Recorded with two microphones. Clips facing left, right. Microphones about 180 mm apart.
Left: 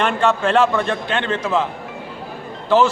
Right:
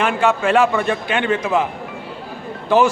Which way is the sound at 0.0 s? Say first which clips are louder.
Even; 5° right (ahead or behind).